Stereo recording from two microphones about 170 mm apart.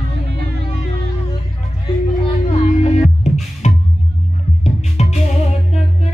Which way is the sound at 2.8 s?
40° left (ahead or behind).